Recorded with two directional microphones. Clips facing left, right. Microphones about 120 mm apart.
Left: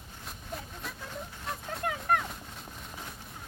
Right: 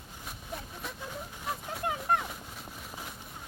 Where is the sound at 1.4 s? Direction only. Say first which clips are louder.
Even; 5° right (ahead or behind).